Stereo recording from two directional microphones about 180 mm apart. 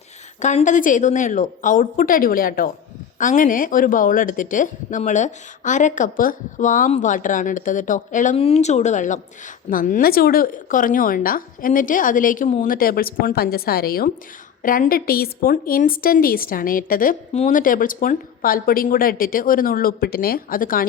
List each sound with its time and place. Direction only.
0.3 s speech: 40° left (ahead or behind)